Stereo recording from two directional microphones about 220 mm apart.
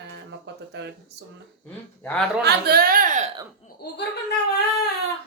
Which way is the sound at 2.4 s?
45° right (ahead or behind).